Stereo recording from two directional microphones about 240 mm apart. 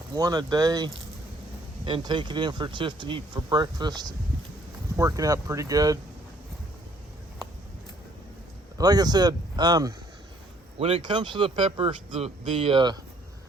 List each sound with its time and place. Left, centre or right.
0.1 s speech: centre
8.8 s speech: centre